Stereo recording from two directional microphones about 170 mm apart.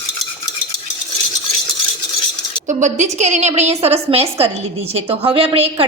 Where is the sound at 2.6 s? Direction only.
45° right (ahead or behind).